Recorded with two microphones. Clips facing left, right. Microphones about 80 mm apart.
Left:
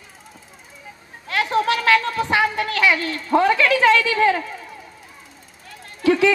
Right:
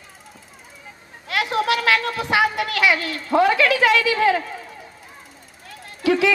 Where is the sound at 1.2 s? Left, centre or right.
Left.